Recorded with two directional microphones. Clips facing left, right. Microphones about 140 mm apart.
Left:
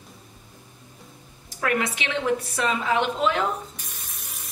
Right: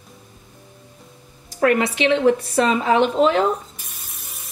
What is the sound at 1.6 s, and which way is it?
Speech, 35° right (ahead or behind).